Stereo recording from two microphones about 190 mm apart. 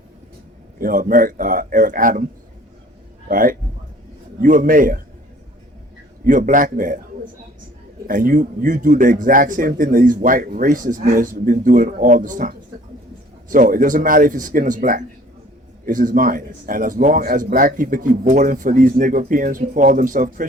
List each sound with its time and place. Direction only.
0.8 s speech: 45° right (ahead or behind)
3.2 s speech: 45° right (ahead or behind)
6.2 s speech: 45° right (ahead or behind)
8.0 s speech: 45° right (ahead or behind)